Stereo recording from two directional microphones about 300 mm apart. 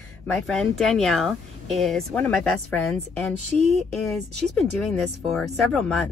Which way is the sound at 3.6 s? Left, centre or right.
Right.